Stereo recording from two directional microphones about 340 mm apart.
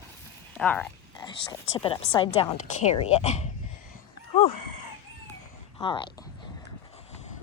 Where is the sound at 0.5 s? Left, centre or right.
Centre.